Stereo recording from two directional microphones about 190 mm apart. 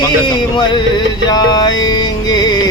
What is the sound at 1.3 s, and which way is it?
Music, 20° left (ahead or behind).